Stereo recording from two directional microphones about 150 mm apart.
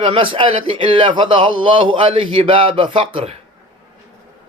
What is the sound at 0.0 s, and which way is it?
A man's voice, 35° right (ahead or behind).